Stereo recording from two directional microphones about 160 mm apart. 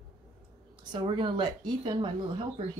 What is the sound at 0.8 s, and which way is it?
Speech, 30° right (ahead or behind).